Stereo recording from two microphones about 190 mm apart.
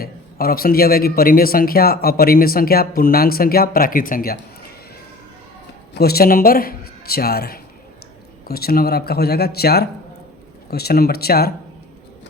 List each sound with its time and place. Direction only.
0.0 s speech: 50° left (ahead or behind)
5.9 s speech: 55° left (ahead or behind)